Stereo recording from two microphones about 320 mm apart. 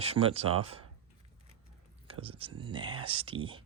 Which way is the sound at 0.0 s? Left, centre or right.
Centre.